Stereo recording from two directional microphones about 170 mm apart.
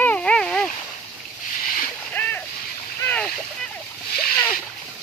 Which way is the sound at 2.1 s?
10° left (ahead or behind).